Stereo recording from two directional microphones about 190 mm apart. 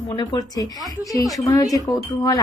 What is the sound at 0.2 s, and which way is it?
A woman's voice, 20° left (ahead or behind).